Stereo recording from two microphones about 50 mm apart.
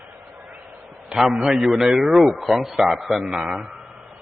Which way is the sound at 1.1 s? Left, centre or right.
Centre.